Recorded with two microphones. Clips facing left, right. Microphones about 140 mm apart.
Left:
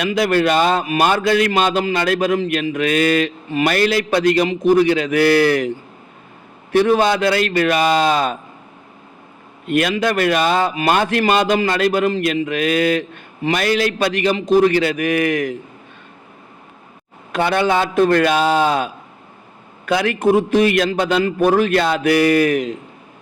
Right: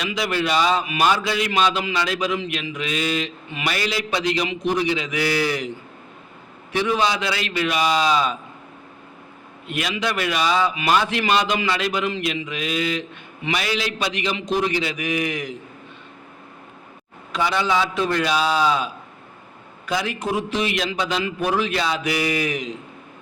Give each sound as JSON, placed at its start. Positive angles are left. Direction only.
{"t": 0.0, "sound": "a man's voice", "side_deg": 50}
{"t": 6.7, "sound": "a man's voice", "side_deg": 50}
{"t": 9.6, "sound": "a man's voice", "side_deg": 50}
{"t": 17.3, "sound": "a man's voice", "side_deg": 55}